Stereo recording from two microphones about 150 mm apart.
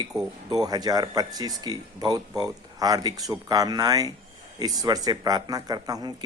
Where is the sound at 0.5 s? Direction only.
25° right (ahead or behind).